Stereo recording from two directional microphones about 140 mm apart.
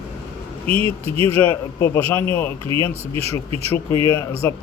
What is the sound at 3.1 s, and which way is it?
Speech, 45° right (ahead or behind).